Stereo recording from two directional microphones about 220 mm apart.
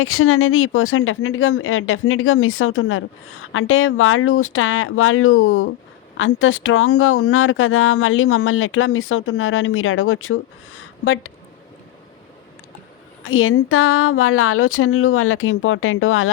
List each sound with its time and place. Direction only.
0.0 s speech: 75° left (ahead or behind)
13.2 s speech: 65° left (ahead or behind)